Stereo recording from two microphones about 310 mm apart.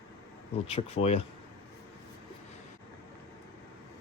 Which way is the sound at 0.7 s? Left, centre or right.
Centre.